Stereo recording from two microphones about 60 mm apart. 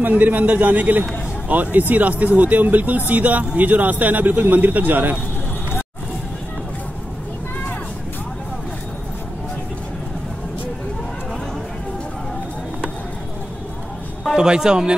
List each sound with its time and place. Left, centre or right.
0.0 s a man's voice: right
14.3 s speech: centre